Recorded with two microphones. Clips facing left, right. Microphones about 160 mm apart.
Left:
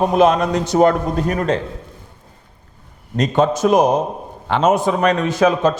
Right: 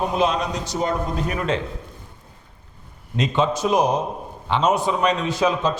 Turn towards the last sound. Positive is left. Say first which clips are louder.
# left 5 dB
turn(degrees=50)  # may be behind; listen again after turning